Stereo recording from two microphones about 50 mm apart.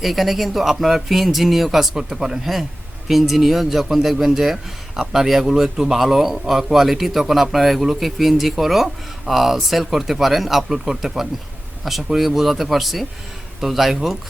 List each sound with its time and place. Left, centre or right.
0.0 s a man's voice: centre